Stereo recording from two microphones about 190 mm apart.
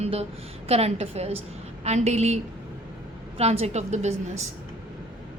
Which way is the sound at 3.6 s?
35° right (ahead or behind).